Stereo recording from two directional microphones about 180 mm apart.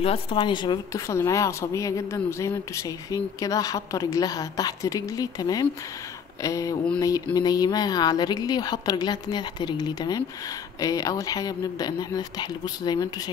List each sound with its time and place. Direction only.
0.0 s speech: 30° left (ahead or behind)